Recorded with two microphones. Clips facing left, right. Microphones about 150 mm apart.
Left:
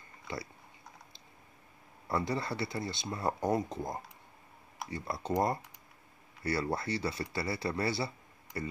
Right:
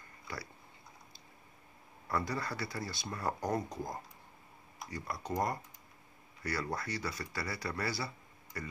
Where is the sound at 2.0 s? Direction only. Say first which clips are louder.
Left 3 dB; 25° left (ahead or behind).